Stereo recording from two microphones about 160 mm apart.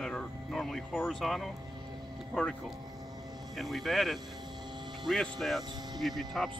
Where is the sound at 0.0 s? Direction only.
5° left (ahead or behind).